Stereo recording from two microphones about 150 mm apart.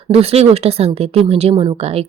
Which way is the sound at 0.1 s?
40° right (ahead or behind).